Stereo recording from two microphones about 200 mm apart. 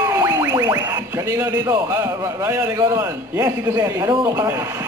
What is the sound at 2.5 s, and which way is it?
A man's voice, 15° right (ahead or behind).